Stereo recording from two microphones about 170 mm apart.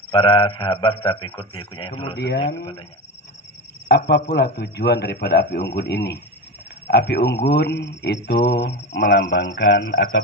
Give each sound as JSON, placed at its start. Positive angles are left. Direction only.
{"t": 0.1, "sound": "a man's voice", "side_deg": 30}
{"t": 2.1, "sound": "speech", "side_deg": 80}
{"t": 2.4, "sound": "a man's voice", "side_deg": 20}
{"t": 3.9, "sound": "a man's voice", "side_deg": 75}